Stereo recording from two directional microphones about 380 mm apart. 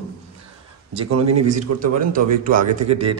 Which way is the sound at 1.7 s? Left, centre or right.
Right.